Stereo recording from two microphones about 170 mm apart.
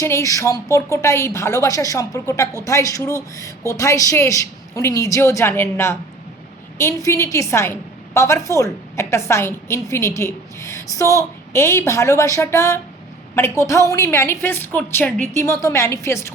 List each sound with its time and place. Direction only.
0.0 s a woman's voice: 15° left (ahead or behind)